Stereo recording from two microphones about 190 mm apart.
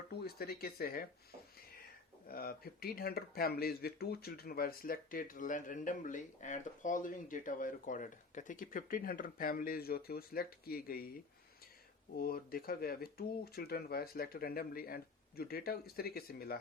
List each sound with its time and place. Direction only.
0.1 s speech: 55° left (ahead or behind)
2.2 s speech: 50° left (ahead or behind)
12.1 s speech: 50° left (ahead or behind)